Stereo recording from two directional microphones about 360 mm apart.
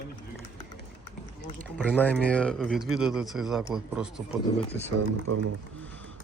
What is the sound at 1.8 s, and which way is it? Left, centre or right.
Speech, centre.